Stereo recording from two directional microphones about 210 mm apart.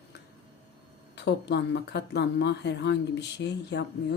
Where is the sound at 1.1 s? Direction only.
55° left (ahead or behind).